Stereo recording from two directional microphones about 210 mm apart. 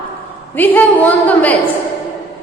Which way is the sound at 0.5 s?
10° left (ahead or behind).